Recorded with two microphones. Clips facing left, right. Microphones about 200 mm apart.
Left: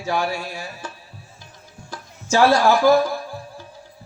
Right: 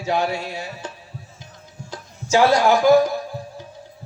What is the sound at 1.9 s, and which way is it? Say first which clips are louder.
Speech: right 2 dB; 15° right (ahead or behind).